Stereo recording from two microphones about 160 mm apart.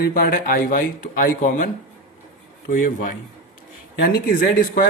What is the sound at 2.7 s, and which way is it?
Speech, 55° left (ahead or behind).